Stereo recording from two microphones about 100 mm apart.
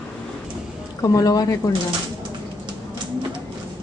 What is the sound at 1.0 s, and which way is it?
Speech, 35° left (ahead or behind).